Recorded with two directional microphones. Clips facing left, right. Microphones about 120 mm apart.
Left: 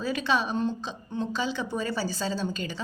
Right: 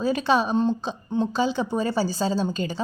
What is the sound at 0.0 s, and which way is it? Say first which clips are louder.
A woman's voice: right 5 dB; 40° right (ahead or behind).